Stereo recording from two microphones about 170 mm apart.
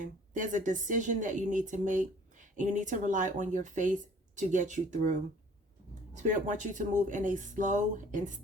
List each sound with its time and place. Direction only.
0.0 s a woman's voice: 50° right (ahead or behind)